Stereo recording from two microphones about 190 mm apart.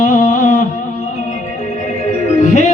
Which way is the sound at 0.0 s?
40° left (ahead or behind).